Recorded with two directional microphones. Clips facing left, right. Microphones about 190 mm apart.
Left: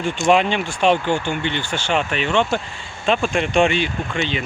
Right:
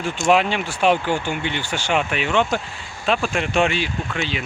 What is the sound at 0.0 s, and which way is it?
Speech, centre (ahead or behind).